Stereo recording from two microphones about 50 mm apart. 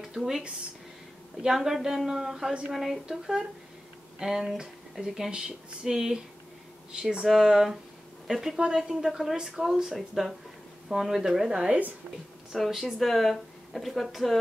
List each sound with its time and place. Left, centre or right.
0.0 s a sound: centre
1.4 s speech: centre
7.2 s speech: centre
12.5 s speech: centre